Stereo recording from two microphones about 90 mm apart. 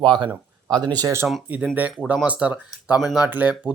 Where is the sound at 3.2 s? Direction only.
20° right (ahead or behind).